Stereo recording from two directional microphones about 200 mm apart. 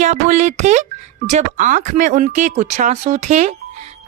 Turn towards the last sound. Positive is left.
turn(degrees=-35)  # may be behind; listen again after turning